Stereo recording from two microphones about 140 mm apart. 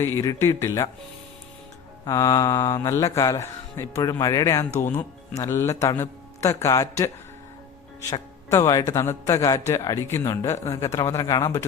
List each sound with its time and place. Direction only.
0.0 s a man's voice: 20° left (ahead or behind)
2.0 s a man's voice: 25° left (ahead or behind)
8.4 s a man's voice: 25° left (ahead or behind)